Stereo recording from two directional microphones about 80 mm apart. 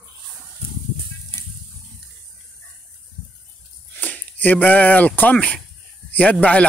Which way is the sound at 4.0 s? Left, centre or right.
Left.